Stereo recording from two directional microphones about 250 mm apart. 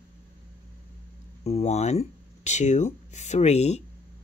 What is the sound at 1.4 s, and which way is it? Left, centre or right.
Speech, left.